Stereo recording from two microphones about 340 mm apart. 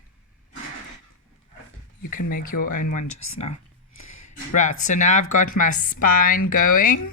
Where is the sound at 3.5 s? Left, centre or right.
Left.